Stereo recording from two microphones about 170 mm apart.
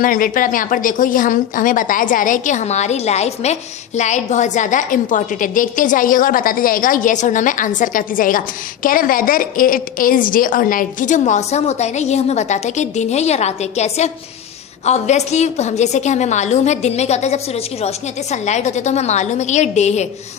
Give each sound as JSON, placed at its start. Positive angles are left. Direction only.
{"t": 0.0, "sound": "speech", "side_deg": 55}